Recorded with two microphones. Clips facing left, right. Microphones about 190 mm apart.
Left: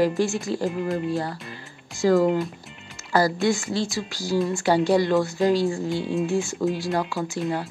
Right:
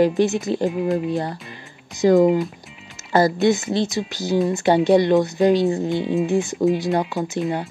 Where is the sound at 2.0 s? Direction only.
20° right (ahead or behind).